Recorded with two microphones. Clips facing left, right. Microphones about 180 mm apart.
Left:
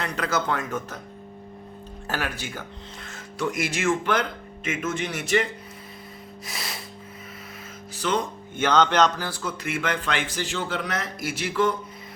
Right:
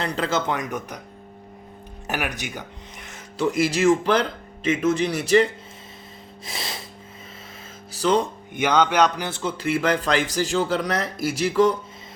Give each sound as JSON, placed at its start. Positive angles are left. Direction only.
{"t": 0.0, "sound": "speech", "side_deg": -25}
{"t": 2.0, "sound": "speech", "side_deg": -15}
{"t": 6.4, "sound": "snort", "side_deg": -25}
{"t": 7.9, "sound": "speech", "side_deg": -35}
{"t": 8.5, "sound": "speech", "side_deg": -10}